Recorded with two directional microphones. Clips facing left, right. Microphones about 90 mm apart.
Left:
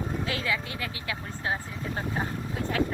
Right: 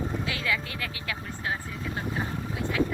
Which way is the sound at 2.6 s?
40° left (ahead or behind).